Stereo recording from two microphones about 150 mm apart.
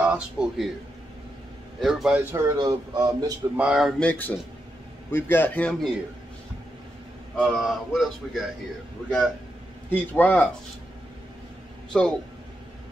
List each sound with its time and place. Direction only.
0.0 s a man's voice: 5° right (ahead or behind)
1.8 s a man's voice: centre (ahead or behind)
2.3 s speech: 25° right (ahead or behind)
3.5 s a man's voice: 5° right (ahead or behind)
4.0 s a man's voice: 10° left (ahead or behind)
7.3 s a man's voice: centre (ahead or behind)
9.8 s a man's voice: 10° left (ahead or behind)
11.9 s a man's voice: 5° left (ahead or behind)